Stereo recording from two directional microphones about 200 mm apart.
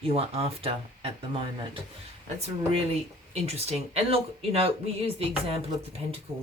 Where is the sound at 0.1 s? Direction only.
30° right (ahead or behind).